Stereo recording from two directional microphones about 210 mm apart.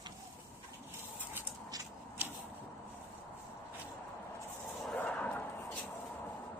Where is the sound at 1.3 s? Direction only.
15° right (ahead or behind).